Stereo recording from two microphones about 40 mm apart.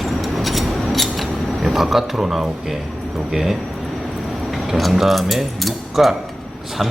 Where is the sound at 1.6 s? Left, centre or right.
Centre.